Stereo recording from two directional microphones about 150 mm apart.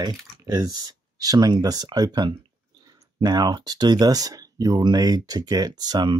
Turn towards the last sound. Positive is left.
turn(degrees=-25)  # may be behind; listen again after turning